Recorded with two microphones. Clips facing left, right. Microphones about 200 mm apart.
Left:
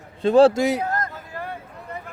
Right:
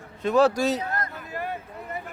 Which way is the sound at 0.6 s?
10° left (ahead or behind).